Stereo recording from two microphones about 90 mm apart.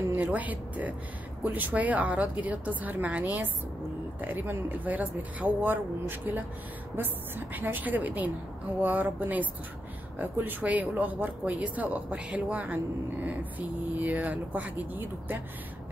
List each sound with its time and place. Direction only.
0.1 s speech: 20° right (ahead or behind)